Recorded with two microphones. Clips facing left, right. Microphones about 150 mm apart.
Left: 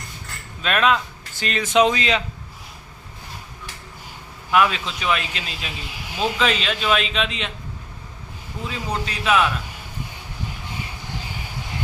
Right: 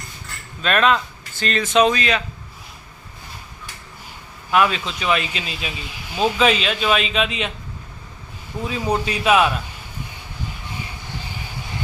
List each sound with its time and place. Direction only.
0.6 s speech: 5° left (ahead or behind); by 2.2 s 20° left (ahead or behind)
4.5 s speech: centre (ahead or behind)
8.7 s a man's voice: 15° right (ahead or behind)